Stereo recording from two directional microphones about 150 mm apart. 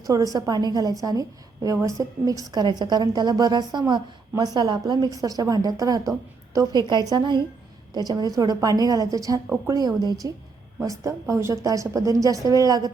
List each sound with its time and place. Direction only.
0.0 s a woman's voice: 25° right (ahead or behind)